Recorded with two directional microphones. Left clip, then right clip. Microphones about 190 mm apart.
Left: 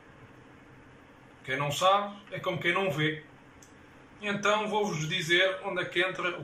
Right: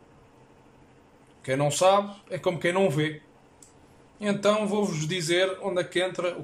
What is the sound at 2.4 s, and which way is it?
Speech, 45° right (ahead or behind).